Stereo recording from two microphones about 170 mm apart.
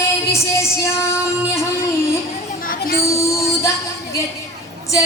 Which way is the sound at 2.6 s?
60° left (ahead or behind).